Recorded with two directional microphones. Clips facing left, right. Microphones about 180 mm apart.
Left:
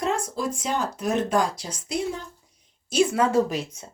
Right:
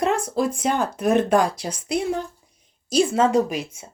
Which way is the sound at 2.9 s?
30° right (ahead or behind).